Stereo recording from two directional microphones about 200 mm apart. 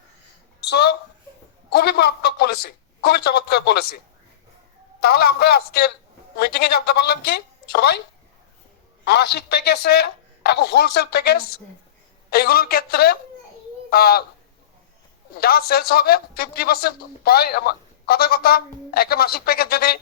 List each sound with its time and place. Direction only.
0.6 s a sound: 55° left (ahead or behind)
4.9 s a man's voice: 50° left (ahead or behind)
9.0 s a man's voice: 55° left (ahead or behind)
15.4 s a man's voice: 50° left (ahead or behind)